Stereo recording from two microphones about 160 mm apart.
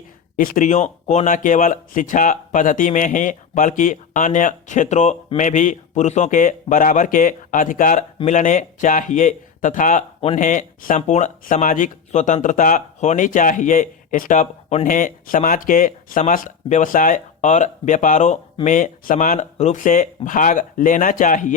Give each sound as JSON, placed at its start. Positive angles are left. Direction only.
{"t": 0.3, "sound": "speech", "side_deg": 55}
{"t": 10.2, "sound": "speech", "side_deg": 40}
{"t": 10.4, "sound": "speech", "side_deg": 55}